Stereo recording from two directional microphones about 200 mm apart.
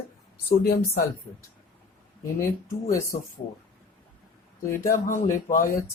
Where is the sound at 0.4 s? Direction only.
50° left (ahead or behind).